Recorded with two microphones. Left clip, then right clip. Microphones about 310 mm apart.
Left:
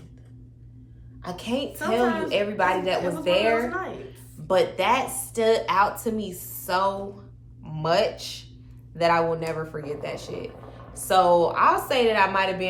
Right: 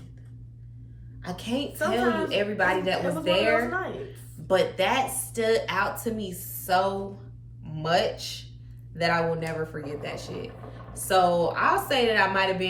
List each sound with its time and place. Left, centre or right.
1.2 s speech: centre
3.7 s speech: centre
4.4 s speech: centre